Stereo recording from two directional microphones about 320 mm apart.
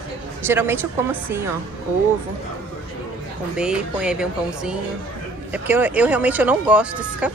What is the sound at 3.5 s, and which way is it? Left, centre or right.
Speech, centre.